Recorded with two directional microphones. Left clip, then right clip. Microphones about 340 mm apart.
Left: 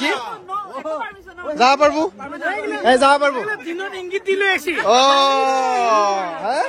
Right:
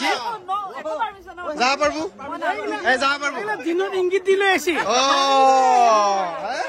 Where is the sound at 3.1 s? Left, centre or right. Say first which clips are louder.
Left 7 dB; centre.